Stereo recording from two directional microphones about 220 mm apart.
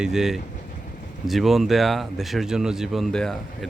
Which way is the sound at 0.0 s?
Centre (ahead or behind).